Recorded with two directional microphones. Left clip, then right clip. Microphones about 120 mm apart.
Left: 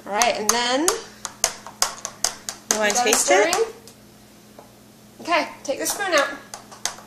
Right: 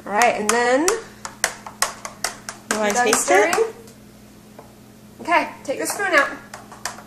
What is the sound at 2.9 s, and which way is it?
Speech, 10° right (ahead or behind).